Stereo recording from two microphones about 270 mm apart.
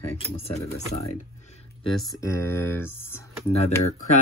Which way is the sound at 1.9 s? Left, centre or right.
Centre.